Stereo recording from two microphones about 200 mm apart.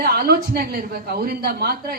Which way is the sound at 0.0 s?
50° right (ahead or behind).